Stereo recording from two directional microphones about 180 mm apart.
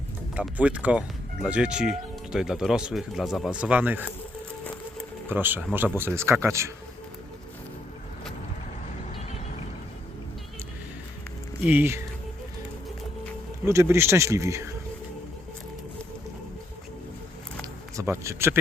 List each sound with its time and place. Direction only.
0.3 s speech: 5° right (ahead or behind)
5.3 s speech: 10° right (ahead or behind)
11.6 s speech: 10° right (ahead or behind)
13.7 s speech: 15° right (ahead or behind)
17.6 s a sound: 15° right (ahead or behind)